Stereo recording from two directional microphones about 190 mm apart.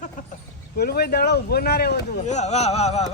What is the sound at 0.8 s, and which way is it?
Speech, 55° left (ahead or behind).